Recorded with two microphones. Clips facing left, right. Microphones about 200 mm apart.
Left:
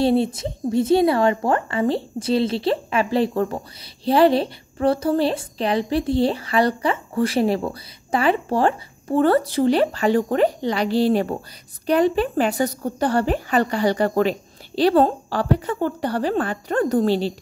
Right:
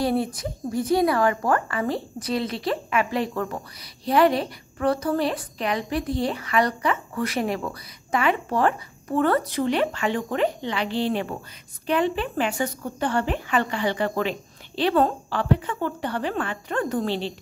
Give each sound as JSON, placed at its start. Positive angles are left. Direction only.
{"t": 0.0, "sound": "a woman's voice", "side_deg": 25}